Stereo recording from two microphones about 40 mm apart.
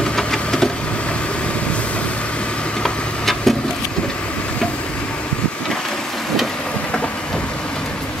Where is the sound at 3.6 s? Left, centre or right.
Left.